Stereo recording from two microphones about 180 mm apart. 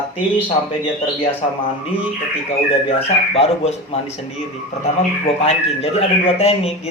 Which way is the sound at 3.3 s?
35° left (ahead or behind).